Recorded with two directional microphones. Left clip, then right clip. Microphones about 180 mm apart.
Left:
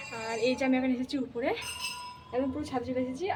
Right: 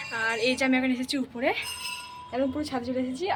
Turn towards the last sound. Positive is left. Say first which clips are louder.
# right 3 dB
turn(degrees=-35)  # may be behind; listen again after turning